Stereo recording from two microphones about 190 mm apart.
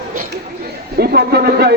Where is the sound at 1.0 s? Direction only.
55° right (ahead or behind).